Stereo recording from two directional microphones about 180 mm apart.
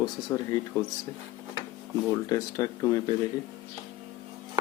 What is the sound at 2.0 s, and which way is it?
Speech, 20° left (ahead or behind).